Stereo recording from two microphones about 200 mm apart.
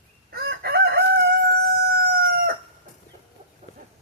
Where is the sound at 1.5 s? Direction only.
50° right (ahead or behind).